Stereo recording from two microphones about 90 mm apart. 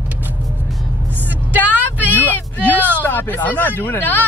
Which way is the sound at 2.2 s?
20° left (ahead or behind).